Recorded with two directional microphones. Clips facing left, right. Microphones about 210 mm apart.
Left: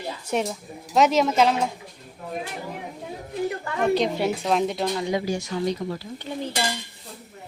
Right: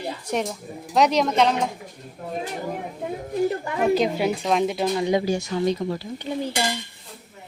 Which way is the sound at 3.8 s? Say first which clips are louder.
Right 1 dB; 5° right (ahead or behind).